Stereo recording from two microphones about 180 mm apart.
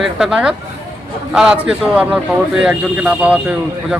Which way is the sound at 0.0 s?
5° right (ahead or behind).